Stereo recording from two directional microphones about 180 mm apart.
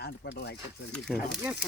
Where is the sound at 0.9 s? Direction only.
Centre (ahead or behind).